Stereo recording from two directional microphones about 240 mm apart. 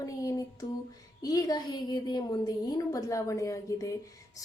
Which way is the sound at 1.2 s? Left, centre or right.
Centre.